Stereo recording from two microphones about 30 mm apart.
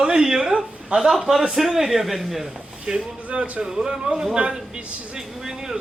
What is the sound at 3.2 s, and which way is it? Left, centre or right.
Speech, right.